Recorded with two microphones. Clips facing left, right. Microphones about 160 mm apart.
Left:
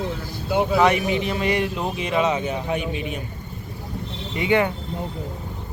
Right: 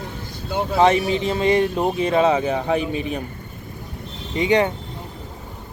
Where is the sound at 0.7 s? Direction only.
30° right (ahead or behind).